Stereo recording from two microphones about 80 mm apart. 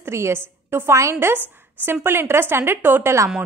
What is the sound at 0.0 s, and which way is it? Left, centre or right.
A woman's voice, right.